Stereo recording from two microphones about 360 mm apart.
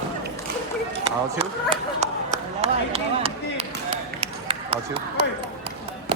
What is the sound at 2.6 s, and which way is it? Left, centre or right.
Run, centre.